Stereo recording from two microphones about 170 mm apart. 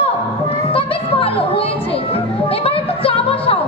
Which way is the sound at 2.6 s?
35° left (ahead or behind).